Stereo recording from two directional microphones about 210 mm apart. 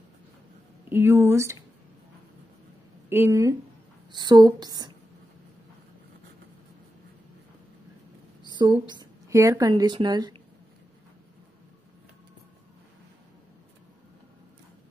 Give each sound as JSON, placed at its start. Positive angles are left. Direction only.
{"t": 0.8, "sound": "speech", "side_deg": -10}
{"t": 3.1, "sound": "speech", "side_deg": -15}
{"t": 8.5, "sound": "a sound", "side_deg": -20}
{"t": 8.8, "sound": "speech", "side_deg": -20}